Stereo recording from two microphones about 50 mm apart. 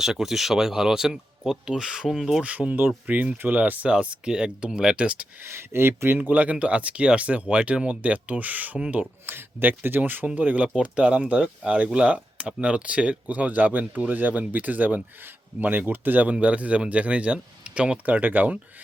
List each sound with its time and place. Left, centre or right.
0.0 s speech: centre
2.4 s speech: right
3.9 s speech: right
5.4 s speech: right
6.1 s speech: right
9.2 s speech: right
16.3 s speech: right